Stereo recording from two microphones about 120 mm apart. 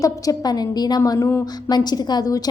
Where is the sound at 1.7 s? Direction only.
35° left (ahead or behind).